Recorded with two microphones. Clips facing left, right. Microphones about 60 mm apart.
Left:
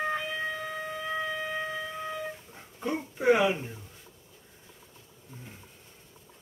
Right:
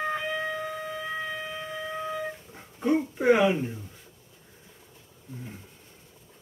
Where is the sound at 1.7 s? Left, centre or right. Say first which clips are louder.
Right 2 dB; centre.